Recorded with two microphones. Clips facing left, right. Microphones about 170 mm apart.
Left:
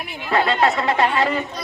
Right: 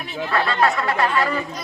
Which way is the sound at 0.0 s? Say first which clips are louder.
Left 2 dB; 20° left (ahead or behind).